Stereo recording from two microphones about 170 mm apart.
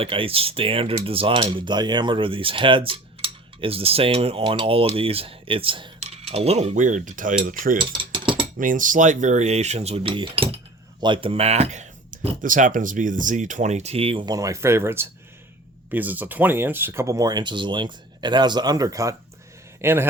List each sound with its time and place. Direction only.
0.0 s speech: 30° right (ahead or behind); by 7.9 s 55° right (ahead or behind)
8.1 s mechanisms: 30° right (ahead or behind)
8.5 s speech: 50° right (ahead or behind); by 20.1 s 15° right (ahead or behind)